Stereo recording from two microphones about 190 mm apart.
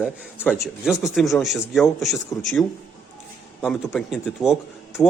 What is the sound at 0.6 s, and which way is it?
A man's voice, centre (ahead or behind).